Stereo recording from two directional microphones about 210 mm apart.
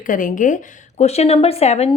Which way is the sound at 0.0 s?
40° left (ahead or behind).